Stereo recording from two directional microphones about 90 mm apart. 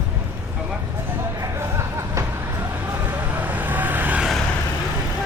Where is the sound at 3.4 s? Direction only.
20° right (ahead or behind).